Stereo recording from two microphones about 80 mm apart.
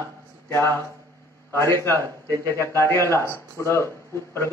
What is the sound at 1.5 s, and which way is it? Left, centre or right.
A man's voice, left.